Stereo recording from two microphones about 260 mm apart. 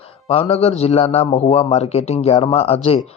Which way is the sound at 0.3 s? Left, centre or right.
Left.